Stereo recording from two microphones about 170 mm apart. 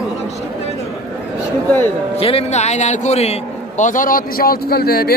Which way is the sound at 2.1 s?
35° left (ahead or behind).